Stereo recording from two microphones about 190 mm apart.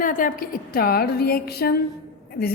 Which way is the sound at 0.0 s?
45° left (ahead or behind).